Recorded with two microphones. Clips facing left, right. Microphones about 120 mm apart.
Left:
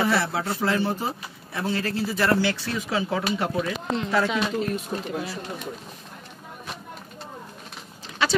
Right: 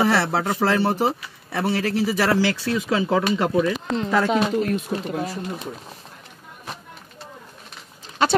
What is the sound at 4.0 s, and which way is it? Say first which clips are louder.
Speech: right 4 dB; 40° right (ahead or behind).